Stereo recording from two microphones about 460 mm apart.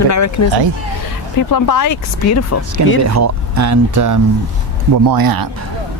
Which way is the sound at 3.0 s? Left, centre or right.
Right.